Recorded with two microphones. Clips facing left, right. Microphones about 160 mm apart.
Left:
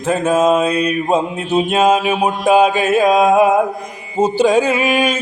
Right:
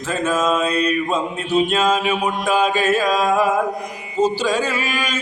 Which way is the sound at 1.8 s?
55° left (ahead or behind).